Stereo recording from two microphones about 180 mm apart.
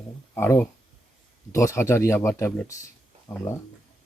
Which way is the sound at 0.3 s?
10° left (ahead or behind).